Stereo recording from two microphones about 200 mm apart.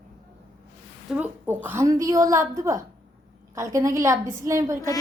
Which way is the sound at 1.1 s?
10° right (ahead or behind).